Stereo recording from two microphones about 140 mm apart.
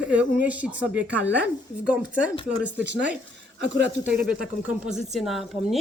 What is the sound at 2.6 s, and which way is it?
A woman's voice, 10° right (ahead or behind).